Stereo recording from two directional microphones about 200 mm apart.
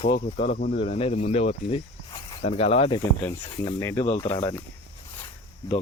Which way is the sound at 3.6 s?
15° left (ahead or behind).